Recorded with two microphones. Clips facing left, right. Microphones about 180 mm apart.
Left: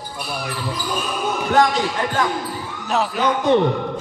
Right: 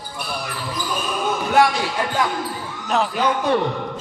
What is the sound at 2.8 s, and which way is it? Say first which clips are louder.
Speech: even; centre (ahead or behind).